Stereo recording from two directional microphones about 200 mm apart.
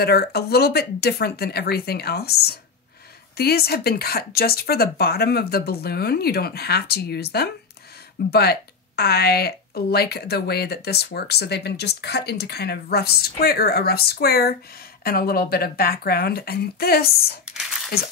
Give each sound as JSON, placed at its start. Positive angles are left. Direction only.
{"t": 0.0, "sound": "speech", "side_deg": 55}
{"t": 17.5, "sound": "crumpling", "side_deg": 0}